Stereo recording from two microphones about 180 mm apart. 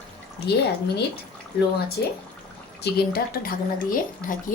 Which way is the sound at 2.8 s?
60° left (ahead or behind).